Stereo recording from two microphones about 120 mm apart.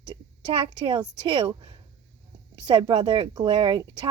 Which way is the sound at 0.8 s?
40° right (ahead or behind).